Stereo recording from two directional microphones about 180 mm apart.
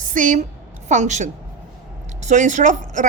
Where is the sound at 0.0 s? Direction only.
45° right (ahead or behind).